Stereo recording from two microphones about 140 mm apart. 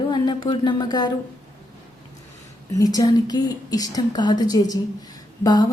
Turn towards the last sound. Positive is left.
turn(degrees=30)  # may be behind; listen again after turning